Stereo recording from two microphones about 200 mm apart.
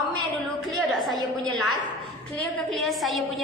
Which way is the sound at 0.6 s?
Centre (ahead or behind).